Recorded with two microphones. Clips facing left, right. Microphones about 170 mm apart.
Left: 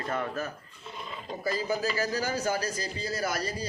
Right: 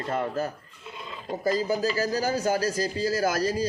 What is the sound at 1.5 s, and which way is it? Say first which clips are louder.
A man's voice: right 4 dB; 40° right (ahead or behind).